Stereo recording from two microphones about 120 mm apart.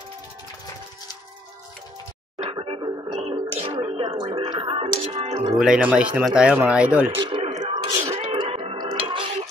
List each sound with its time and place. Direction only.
2.4 s television: 45° right (ahead or behind)
5.0 s speech: 45° right (ahead or behind)
5.6 s speech: 10° right (ahead or behind)
7.2 s a sound: 40° right (ahead or behind)
7.7 s wail: 35° right (ahead or behind)
8.3 s music: 45° right (ahead or behind)